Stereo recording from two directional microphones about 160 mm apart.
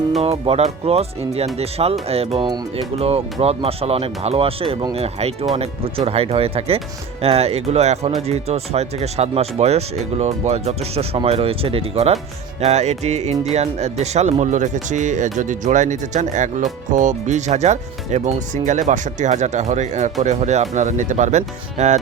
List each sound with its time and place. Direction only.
0.2 s speech: 40° right (ahead or behind)